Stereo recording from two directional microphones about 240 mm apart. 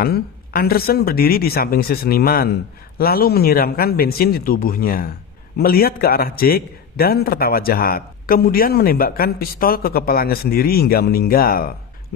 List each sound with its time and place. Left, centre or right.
0.0 s a man's voice: left